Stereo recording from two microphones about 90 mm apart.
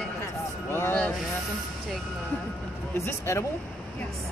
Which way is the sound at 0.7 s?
25° left (ahead or behind).